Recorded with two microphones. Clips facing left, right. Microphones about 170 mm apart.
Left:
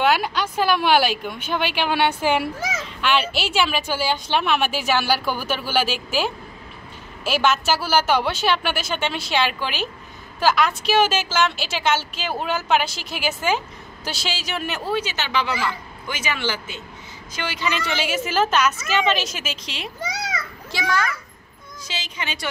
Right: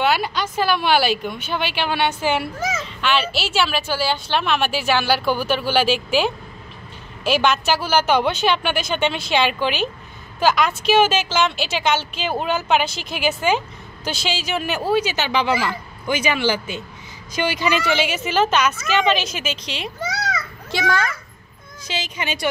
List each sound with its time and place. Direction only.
0.0 s a woman's voice: 10° left (ahead or behind)
7.2 s a woman's voice: 5° left (ahead or behind)
20.7 s a child's voice: 25° right (ahead or behind)
21.8 s speech: 10° right (ahead or behind)